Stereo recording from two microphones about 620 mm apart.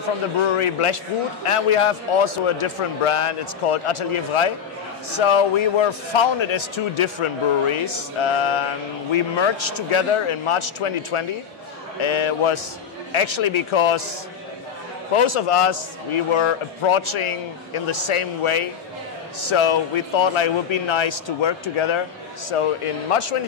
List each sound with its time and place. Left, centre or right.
0.5 s a man's voice: left
15.1 s a man's voice: left